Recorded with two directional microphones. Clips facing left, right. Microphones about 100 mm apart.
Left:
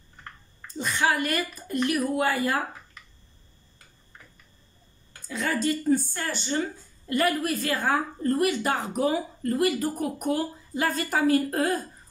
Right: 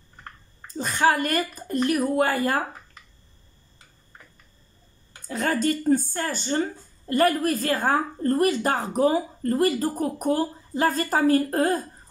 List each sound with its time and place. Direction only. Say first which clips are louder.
0.7 s speech: right 4 dB; 40° right (ahead or behind)
5.3 s speech: right 3 dB; 45° right (ahead or behind)